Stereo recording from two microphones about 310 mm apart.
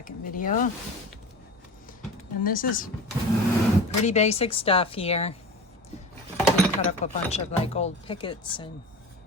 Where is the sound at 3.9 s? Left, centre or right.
Left.